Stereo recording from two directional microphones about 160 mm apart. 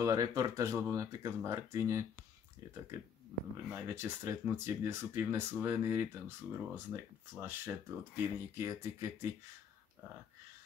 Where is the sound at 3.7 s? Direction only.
15° right (ahead or behind).